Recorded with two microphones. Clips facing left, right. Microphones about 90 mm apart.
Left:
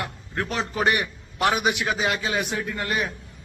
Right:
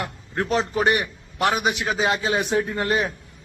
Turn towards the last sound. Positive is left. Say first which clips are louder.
# right 4 dB
turn(degrees=-30)  # may be behind; listen again after turning